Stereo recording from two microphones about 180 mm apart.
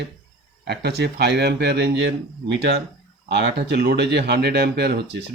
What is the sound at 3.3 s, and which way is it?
Speech, 65° right (ahead or behind).